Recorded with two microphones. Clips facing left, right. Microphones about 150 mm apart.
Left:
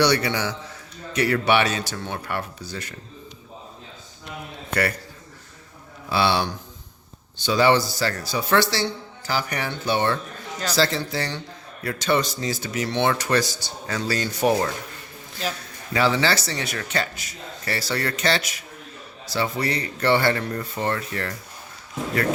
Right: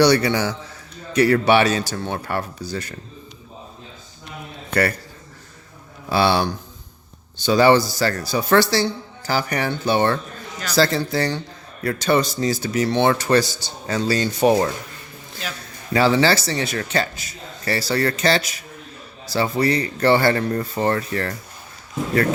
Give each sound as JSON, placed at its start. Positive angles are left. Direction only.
{"t": 0.0, "sound": "speech", "side_deg": -35}
{"t": 6.1, "sound": "speech", "side_deg": -45}
{"t": 15.9, "sound": "speech", "side_deg": -35}